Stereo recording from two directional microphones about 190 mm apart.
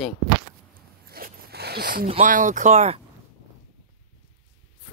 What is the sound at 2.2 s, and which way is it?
Speech, 45° right (ahead or behind).